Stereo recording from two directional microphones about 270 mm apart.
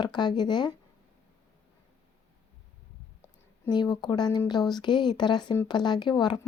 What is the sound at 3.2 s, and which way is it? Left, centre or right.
Speech, centre.